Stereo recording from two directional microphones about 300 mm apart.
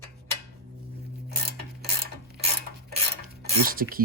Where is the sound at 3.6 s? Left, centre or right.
Right.